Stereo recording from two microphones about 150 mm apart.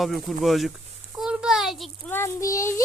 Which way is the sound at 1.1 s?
5° right (ahead or behind).